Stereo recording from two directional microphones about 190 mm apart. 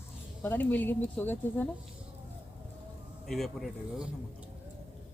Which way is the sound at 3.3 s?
Centre (ahead or behind).